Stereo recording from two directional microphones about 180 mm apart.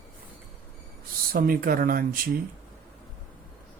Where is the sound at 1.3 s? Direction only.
55° right (ahead or behind).